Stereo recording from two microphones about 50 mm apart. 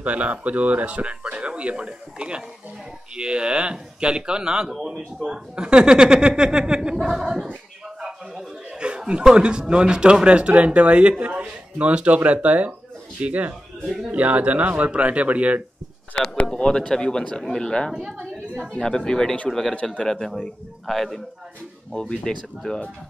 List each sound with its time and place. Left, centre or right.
0.0 s speech: right
7.1 s speech: centre
8.6 s speech: centre
16.5 s speech: centre
19.7 s speech: left
20.1 s speech: centre
22.1 s speech: centre